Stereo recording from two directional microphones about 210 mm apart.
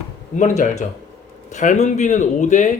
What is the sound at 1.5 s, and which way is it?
Speech, 35° left (ahead or behind).